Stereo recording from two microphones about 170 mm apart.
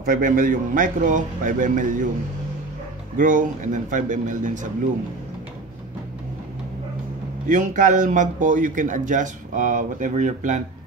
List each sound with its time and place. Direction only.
0.0 s speech: 55° right (ahead or behind)
3.2 s speech: 50° right (ahead or behind)
7.4 s speech: 50° right (ahead or behind)